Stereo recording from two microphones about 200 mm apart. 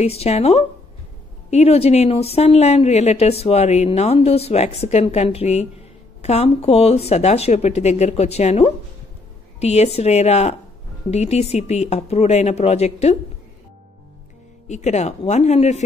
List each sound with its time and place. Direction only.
0.0 s speech: 30° left (ahead or behind)
14.7 s speech: 35° left (ahead or behind)